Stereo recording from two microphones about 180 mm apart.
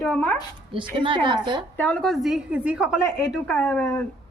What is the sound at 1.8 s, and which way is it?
A woman's voice, 5° left (ahead or behind).